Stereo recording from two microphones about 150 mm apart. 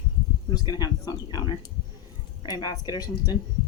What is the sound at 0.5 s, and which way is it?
Speech, 30° left (ahead or behind).